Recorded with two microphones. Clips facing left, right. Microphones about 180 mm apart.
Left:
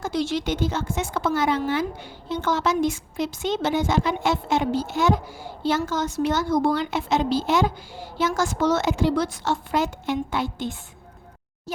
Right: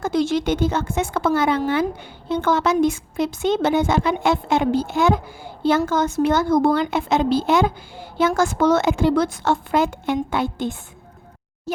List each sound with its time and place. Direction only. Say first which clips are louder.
0.0 s a woman's voice: right 5 dB; 50° right (ahead or behind)